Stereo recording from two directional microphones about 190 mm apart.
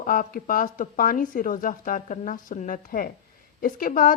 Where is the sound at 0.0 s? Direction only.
45° left (ahead or behind).